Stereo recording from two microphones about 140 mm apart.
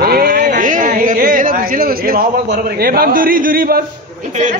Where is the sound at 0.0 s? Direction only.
90° right.